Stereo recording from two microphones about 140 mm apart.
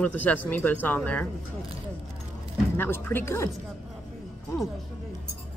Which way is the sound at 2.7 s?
15° left (ahead or behind).